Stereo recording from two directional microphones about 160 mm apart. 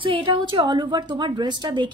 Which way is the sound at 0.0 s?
30° right (ahead or behind).